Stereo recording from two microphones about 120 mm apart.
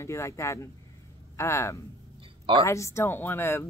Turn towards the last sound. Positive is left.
turn(degrees=20)  # may be behind; listen again after turning